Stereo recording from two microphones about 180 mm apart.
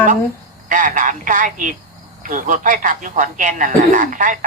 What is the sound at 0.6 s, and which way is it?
Speech, 45° right (ahead or behind).